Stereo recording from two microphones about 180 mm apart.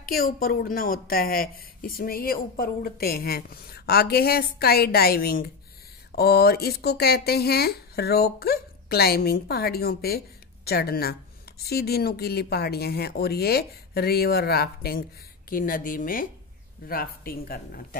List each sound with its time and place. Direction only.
0.0 s speech: 55° left (ahead or behind)